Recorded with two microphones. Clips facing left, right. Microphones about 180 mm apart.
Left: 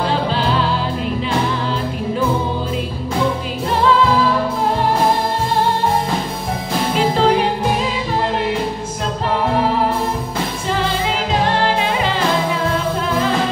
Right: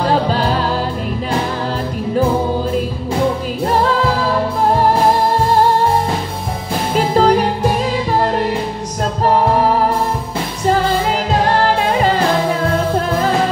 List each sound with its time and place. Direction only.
0.0 s music: 40° right (ahead or behind)
7.2 s music: 40° right (ahead or behind)
10.7 s music: 45° right (ahead or behind)